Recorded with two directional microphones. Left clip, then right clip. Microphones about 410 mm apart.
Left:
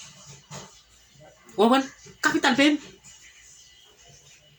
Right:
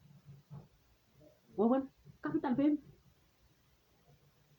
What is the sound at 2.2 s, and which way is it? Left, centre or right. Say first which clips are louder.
Speech: left 15 dB; right.